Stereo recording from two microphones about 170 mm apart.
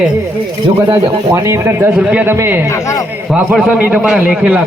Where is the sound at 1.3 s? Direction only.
15° right (ahead or behind).